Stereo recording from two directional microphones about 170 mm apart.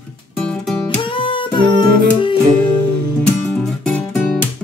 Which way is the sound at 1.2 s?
30° left (ahead or behind).